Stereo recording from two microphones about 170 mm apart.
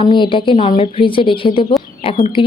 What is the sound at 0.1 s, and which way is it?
A woman's voice, 30° left (ahead or behind).